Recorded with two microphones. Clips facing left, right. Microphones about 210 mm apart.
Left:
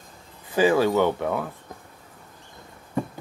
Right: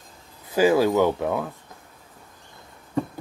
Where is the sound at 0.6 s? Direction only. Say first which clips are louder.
Right 1 dB; 10° right (ahead or behind).